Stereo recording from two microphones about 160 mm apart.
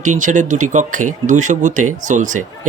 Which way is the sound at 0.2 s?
50° right (ahead or behind).